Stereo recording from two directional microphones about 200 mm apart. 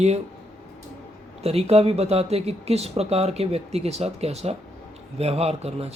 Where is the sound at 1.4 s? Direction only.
30° right (ahead or behind).